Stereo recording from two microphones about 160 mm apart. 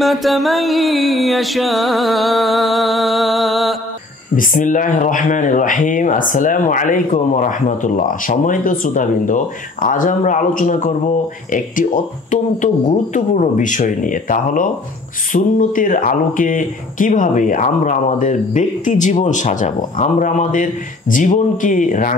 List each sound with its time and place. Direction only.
0.0 s music: centre (ahead or behind)
4.4 s speech: 55° left (ahead or behind)